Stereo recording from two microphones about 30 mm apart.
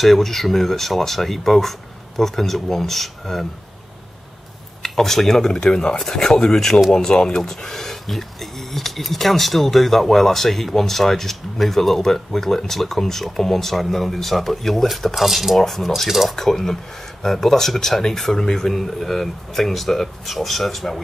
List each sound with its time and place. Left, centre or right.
0.0 s speech: centre
4.8 s speech: centre
15.1 s speech: centre
15.5 s speech: centre
18.7 s speech: centre